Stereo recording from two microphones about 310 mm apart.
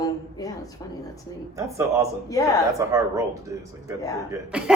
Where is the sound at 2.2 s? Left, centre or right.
Centre.